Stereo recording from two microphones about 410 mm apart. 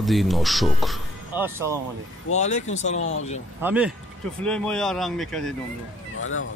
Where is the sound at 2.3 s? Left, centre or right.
Centre.